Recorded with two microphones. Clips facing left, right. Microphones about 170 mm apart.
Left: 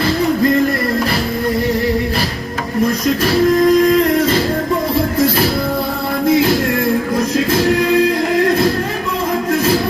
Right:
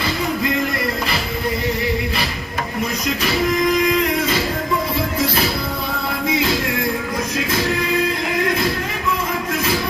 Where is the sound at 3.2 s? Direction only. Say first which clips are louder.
Left 7 dB; 50° left (ahead or behind).